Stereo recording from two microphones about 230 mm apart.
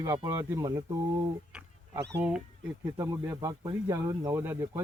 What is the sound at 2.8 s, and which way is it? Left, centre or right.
Speech, centre.